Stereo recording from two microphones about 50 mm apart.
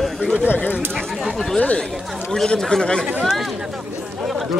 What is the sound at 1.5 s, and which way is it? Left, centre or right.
Speech, left.